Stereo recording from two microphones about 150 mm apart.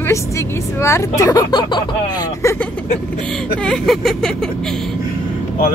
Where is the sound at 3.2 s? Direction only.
5° left (ahead or behind).